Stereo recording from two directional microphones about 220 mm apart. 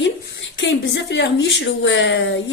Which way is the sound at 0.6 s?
55° left (ahead or behind).